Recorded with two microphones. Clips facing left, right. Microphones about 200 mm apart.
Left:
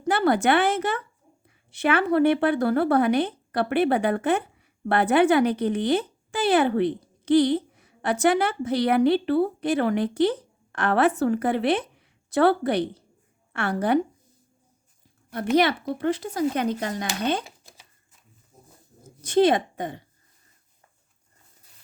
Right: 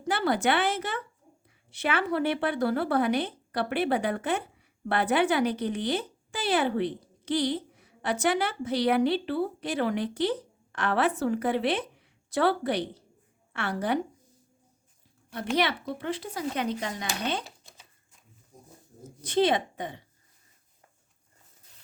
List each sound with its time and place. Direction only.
0.1 s speech: 55° left (ahead or behind)
15.5 s speech: 45° left (ahead or behind)
17.4 s shuffling cards: 5° left (ahead or behind)
19.2 s speech: 45° left (ahead or behind)